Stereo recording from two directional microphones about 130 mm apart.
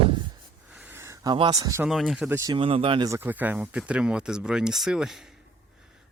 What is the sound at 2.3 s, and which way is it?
Speech, 25° right (ahead or behind).